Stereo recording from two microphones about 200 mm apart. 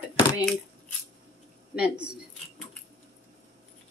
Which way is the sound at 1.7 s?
5° right (ahead or behind).